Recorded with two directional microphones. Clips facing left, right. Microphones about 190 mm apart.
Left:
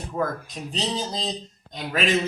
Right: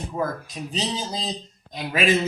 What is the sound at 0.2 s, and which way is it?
Speech, 15° right (ahead or behind).